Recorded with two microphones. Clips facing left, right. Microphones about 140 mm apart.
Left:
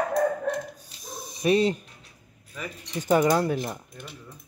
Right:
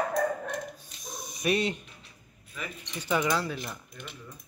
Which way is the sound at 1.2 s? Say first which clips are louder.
Left 6 dB; 30° left (ahead or behind).